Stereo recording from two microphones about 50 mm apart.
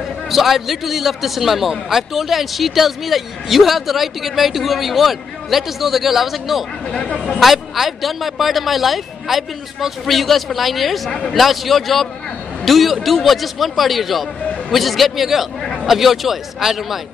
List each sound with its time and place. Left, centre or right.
0.3 s speech: centre
6.9 s speech: centre
7.3 s speech: centre